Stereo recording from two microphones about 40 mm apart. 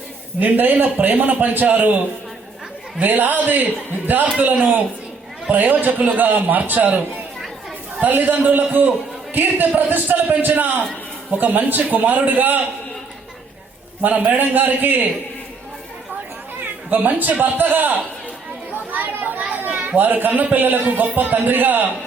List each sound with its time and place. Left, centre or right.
0.3 s a man's voice: right
3.0 s a man's voice: right
8.0 s a man's voice: right
14.3 s a man's voice: right
16.9 s a man's voice: right
18.7 s chatter: right
19.5 s children playing: right
20.0 s a man's voice: right